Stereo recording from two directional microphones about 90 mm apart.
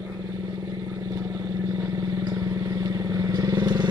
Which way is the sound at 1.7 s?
40° right (ahead or behind).